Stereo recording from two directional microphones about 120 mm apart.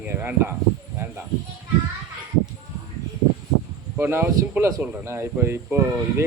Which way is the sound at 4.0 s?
20° right (ahead or behind).